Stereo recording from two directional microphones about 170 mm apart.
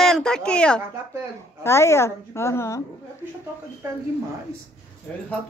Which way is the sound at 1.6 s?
15° left (ahead or behind).